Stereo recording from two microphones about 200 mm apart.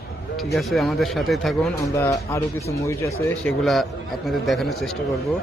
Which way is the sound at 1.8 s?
15° left (ahead or behind).